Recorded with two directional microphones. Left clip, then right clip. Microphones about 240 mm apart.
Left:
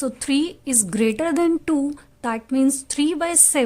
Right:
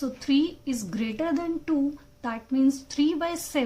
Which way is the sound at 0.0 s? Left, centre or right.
Left.